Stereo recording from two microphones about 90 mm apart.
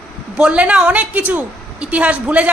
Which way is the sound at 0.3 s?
10° right (ahead or behind).